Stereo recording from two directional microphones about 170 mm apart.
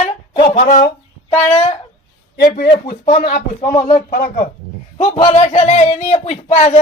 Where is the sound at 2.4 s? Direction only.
60° left (ahead or behind).